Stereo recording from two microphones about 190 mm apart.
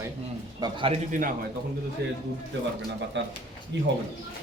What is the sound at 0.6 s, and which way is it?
Speech, 25° right (ahead or behind).